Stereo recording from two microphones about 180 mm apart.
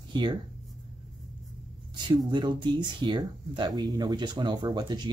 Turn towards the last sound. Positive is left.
turn(degrees=-25)  # may be behind; listen again after turning